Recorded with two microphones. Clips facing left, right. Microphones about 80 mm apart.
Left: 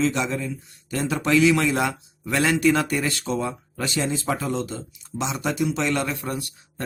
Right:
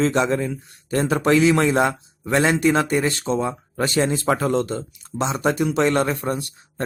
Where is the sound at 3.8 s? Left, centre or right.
Right.